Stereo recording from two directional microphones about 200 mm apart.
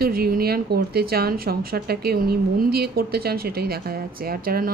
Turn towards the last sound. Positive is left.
turn(degrees=-45)  # may be behind; listen again after turning